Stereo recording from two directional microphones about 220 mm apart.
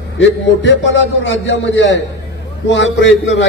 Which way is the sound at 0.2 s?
55° left (ahead or behind).